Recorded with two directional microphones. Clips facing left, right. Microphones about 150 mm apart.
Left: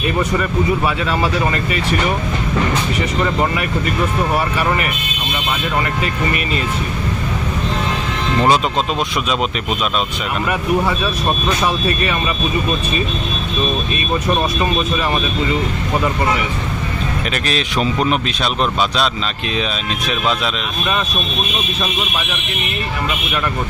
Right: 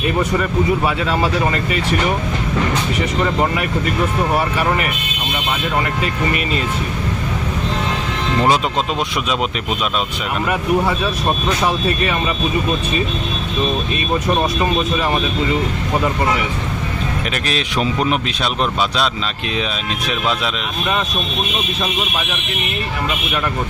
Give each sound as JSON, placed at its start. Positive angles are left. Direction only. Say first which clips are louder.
{"t": 0.2, "sound": "speech", "louder": "even", "side_deg": -20}
{"t": 1.0, "sound": "speech", "louder": "even", "side_deg": -40}
{"t": 3.2, "sound": "speech", "louder": "even", "side_deg": -20}
{"t": 8.4, "sound": "speech", "louder": "left 2 dB", "side_deg": -10}
{"t": 14.1, "sound": "speech", "louder": "even", "side_deg": -20}
{"t": 17.3, "sound": "speech", "louder": "left 2 dB", "side_deg": -10}